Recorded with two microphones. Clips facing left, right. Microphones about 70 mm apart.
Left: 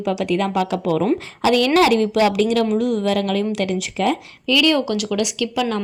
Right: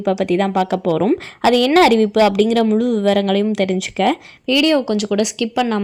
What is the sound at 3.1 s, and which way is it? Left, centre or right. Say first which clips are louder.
A woman's voice: right 5 dB; right.